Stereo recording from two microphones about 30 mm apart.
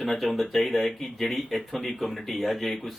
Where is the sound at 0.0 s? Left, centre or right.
Centre.